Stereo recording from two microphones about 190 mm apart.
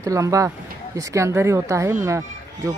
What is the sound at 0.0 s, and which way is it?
Speech, 15° right (ahead or behind).